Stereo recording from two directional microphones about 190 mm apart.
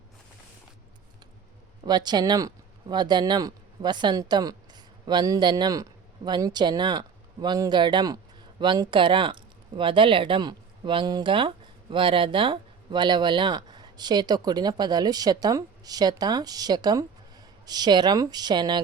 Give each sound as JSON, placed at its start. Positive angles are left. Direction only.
{"t": 1.8, "sound": "speech", "side_deg": -20}